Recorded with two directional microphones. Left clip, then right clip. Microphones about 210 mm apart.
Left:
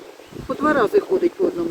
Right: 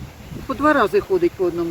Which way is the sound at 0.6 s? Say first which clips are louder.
Right 1 dB; 55° right (ahead or behind).